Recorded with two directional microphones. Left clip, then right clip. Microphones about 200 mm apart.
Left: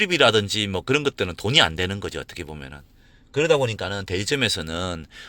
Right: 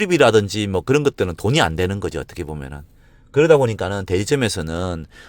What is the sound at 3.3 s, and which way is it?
Speech, 50° right (ahead or behind).